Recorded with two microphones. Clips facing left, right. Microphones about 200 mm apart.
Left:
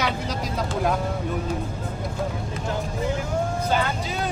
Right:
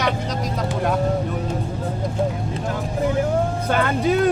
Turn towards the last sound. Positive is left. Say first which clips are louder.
# right 6 dB
turn(degrees=-55)  # may be behind; listen again after turning